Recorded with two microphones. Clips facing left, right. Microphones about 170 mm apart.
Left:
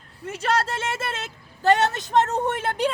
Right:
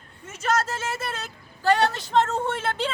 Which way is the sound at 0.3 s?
30° left (ahead or behind).